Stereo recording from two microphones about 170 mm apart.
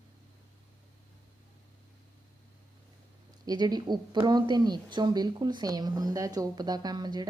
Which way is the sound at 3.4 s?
25° right (ahead or behind).